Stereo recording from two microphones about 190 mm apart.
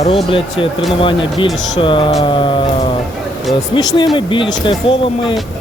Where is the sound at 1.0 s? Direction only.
25° left (ahead or behind).